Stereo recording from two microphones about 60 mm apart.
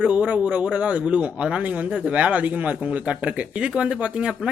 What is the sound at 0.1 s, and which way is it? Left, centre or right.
Speech, right.